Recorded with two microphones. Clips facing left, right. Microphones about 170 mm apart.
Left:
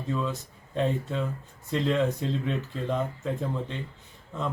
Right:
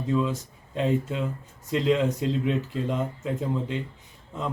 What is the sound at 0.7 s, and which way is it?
Speech, 5° right (ahead or behind).